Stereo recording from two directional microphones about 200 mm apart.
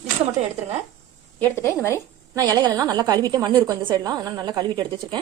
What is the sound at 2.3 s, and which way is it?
A woman's voice, 20° right (ahead or behind).